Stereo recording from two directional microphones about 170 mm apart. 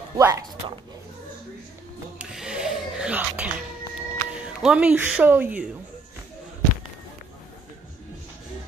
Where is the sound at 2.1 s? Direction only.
5° right (ahead or behind).